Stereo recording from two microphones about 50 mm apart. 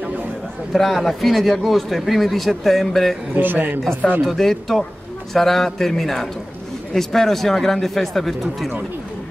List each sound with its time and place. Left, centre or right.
0.7 s a man's voice: centre
3.3 s a man's voice: right
4.2 s a man's voice: centre